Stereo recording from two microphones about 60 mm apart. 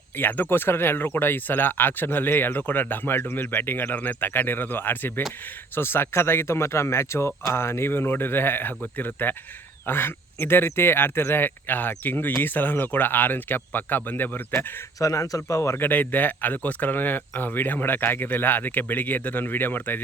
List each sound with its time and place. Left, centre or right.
0.2 s speech: left
14.9 s speech: left
15.7 s speech: left